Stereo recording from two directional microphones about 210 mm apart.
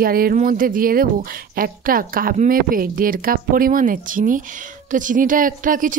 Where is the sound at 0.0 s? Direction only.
45° right (ahead or behind).